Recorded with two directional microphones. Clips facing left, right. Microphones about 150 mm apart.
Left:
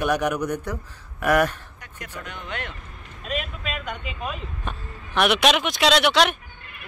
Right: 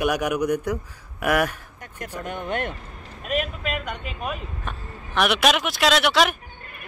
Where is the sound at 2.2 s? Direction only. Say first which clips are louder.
Right 8 dB; 50° right (ahead or behind).